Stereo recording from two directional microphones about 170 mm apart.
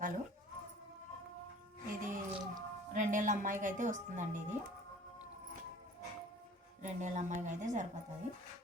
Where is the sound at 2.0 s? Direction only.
50° right (ahead or behind).